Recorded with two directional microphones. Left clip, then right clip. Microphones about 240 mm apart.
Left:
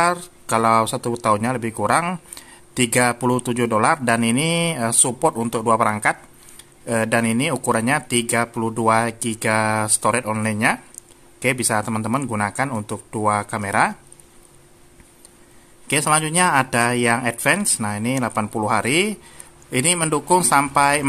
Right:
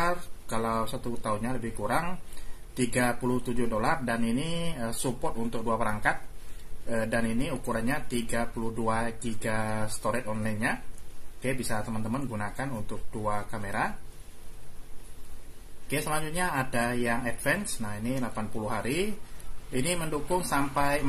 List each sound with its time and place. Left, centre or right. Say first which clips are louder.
0.0 s speech: left 10 dB; left
15.9 s speech: left 12 dB; left